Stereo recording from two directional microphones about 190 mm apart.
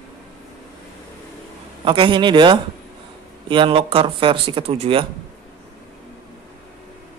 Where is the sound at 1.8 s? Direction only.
25° right (ahead or behind).